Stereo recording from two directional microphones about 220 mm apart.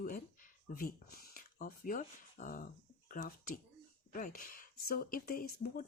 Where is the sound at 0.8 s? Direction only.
40° left (ahead or behind).